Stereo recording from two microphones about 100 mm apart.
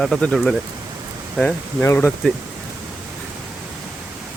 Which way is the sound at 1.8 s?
25° left (ahead or behind).